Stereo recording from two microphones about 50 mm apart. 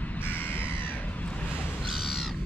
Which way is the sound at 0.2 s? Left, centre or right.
Left.